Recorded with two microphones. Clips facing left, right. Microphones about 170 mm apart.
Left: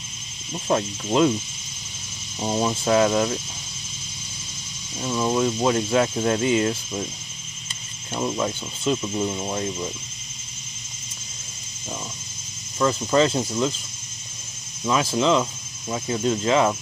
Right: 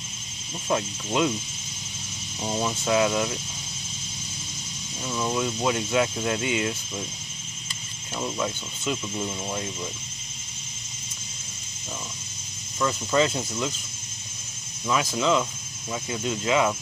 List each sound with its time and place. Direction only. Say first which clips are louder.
0.7 s speech: left 4 dB; 35° left (ahead or behind)
2.4 s speech: left 4 dB; 30° left (ahead or behind)
5.0 s speech: left 5 dB; 30° left (ahead or behind)
8.2 s speech: left 4 dB; 30° left (ahead or behind)
12.7 s speech: left 4 dB; 35° left (ahead or behind)
14.9 s speech: left 3 dB; 30° left (ahead or behind)